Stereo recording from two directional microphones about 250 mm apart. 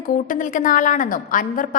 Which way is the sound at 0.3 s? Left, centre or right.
Left.